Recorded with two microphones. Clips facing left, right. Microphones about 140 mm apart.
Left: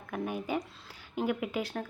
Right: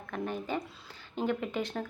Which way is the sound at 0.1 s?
10° left (ahead or behind).